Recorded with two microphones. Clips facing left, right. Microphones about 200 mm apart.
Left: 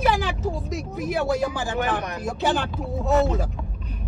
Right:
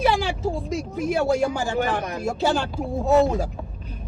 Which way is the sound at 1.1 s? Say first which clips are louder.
Right 2 dB; 30° right (ahead or behind).